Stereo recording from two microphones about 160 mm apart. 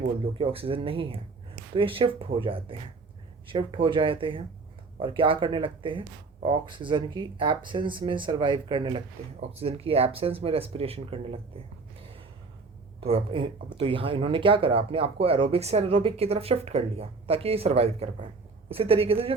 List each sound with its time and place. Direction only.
0.3 s speech: 35° right (ahead or behind)
11.9 s gasp: 35° right (ahead or behind)
13.0 s speech: 40° right (ahead or behind)